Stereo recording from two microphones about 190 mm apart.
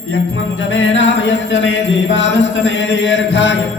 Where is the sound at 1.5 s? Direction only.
70° left (ahead or behind).